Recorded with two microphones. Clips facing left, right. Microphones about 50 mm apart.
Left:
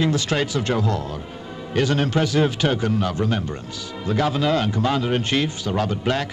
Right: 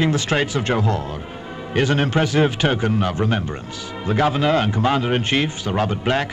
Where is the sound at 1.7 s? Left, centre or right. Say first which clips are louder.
Right 2 dB; right.